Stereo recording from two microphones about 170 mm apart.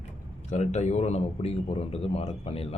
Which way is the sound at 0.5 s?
45° left (ahead or behind).